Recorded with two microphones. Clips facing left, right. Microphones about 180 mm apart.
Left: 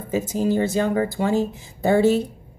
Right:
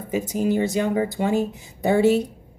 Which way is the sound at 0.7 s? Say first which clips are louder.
Left 1 dB; 15° right (ahead or behind).